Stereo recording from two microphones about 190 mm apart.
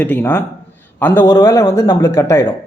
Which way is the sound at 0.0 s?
10° left (ahead or behind).